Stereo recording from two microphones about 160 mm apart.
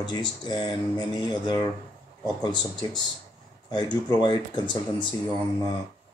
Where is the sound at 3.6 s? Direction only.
25° left (ahead or behind).